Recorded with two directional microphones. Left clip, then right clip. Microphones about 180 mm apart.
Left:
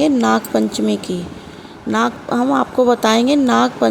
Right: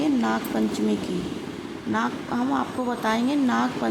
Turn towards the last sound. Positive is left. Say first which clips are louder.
# left 10 dB
turn(degrees=40)  # may be behind; listen again after turning